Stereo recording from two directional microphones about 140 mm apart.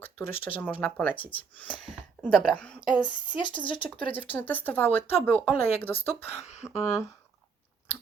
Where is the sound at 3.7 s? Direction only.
35° left (ahead or behind).